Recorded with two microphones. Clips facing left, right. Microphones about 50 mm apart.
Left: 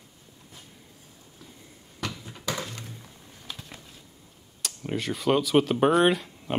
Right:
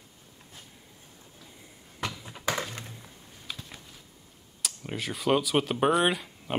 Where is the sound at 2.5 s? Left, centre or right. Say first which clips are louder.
Right 2 dB; right.